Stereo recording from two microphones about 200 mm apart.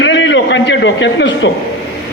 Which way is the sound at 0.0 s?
65° left (ahead or behind).